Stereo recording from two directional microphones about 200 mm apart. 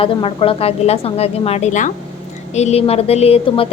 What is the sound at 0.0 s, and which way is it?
A woman's voice, 25° left (ahead or behind).